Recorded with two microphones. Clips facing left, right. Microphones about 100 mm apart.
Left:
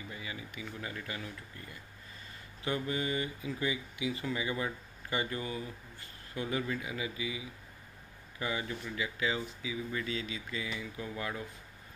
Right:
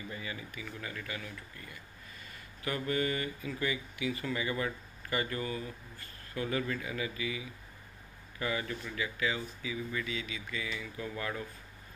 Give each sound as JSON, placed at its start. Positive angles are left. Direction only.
{"t": 0.1, "sound": "speech", "side_deg": 15}
{"t": 9.9, "sound": "speech", "side_deg": 30}